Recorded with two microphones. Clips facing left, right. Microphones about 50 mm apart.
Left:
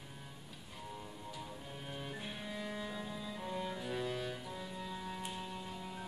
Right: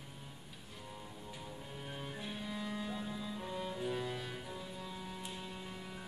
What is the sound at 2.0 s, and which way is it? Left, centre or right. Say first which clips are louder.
Music: right 2 dB; centre.